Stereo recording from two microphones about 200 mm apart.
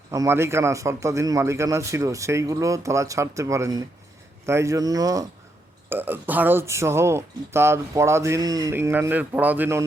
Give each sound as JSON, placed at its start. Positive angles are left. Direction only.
{"t": 0.1, "sound": "speech", "side_deg": -15}